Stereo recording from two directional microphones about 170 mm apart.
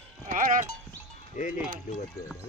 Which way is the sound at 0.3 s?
50° right (ahead or behind).